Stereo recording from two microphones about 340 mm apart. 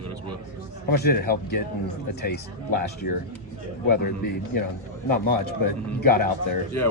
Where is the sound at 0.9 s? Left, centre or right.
Left.